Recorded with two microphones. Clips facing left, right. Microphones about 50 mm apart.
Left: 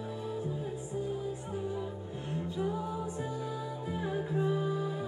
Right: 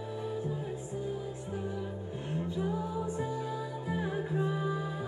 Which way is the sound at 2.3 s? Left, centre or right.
Centre.